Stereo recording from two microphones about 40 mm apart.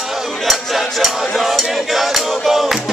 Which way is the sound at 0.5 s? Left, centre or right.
Centre.